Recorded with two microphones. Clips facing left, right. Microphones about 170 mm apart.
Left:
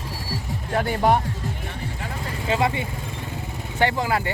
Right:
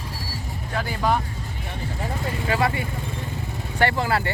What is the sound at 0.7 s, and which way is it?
Music, 55° left (ahead or behind).